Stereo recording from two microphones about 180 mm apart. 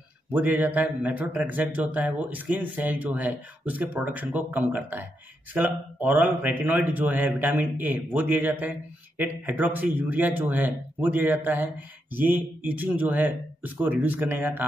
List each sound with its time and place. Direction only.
0.3 s speech: 10° right (ahead or behind)